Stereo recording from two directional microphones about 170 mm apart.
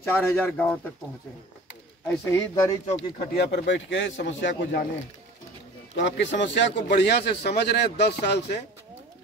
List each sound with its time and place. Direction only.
0.0 s speech: 15° left (ahead or behind)
2.0 s speech: 20° left (ahead or behind)
3.3 s a man's voice: 85° left
5.9 s speech: 90° left